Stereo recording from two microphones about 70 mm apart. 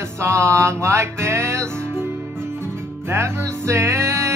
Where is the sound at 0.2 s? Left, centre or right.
Right.